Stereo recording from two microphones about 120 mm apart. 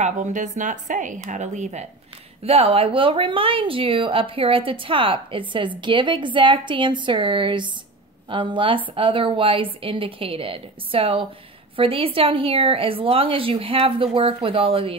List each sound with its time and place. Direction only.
0.0 s speech: 90° right; by 1.9 s 75° right (ahead or behind)
2.4 s a woman's voice: 55° right (ahead or behind)